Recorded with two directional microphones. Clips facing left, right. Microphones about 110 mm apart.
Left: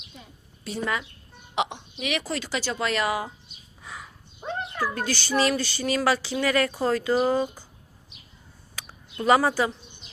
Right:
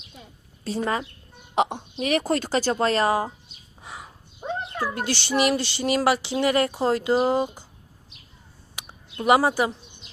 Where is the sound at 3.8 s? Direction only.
25° right (ahead or behind).